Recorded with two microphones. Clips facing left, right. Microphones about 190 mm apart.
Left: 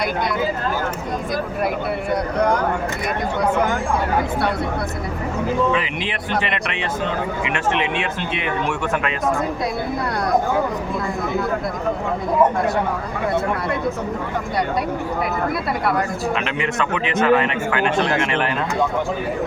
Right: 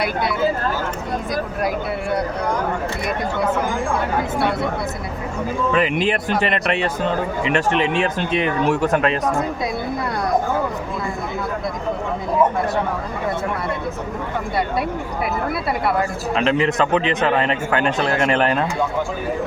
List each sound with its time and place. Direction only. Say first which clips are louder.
0.0 s speech: even; 5° right (ahead or behind)
5.7 s a man's voice: right 5 dB; 45° right (ahead or behind)
16.3 s a man's voice: right 5 dB; 35° right (ahead or behind)